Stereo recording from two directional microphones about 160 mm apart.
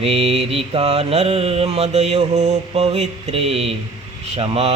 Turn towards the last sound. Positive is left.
turn(degrees=-40)  # may be behind; listen again after turning